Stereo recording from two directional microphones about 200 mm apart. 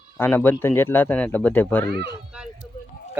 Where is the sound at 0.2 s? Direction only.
10° left (ahead or behind).